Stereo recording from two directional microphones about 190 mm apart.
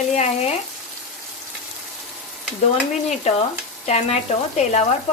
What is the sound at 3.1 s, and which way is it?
Frying, 35° left (ahead or behind).